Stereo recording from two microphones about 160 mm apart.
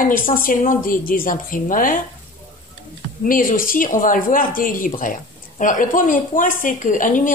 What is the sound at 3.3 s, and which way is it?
Speech, 60° left (ahead or behind).